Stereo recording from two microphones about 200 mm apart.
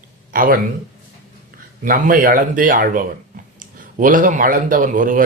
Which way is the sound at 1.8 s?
45° right (ahead or behind).